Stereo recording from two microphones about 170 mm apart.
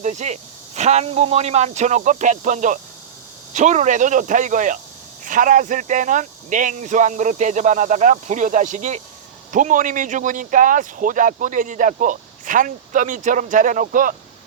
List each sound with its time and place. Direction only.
0.0 s speech: 45° right (ahead or behind)